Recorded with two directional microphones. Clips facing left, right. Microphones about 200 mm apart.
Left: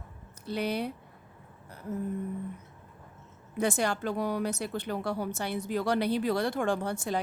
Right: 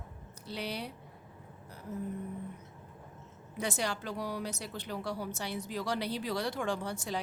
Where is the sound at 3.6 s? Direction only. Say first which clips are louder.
Left 6 dB; 55° left (ahead or behind).